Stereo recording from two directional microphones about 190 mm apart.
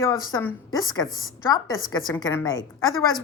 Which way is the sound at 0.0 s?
20° left (ahead or behind).